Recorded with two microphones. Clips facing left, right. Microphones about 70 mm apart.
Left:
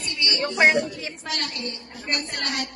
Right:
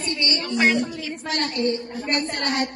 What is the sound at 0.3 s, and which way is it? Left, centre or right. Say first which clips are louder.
Speech: left 2 dB; left.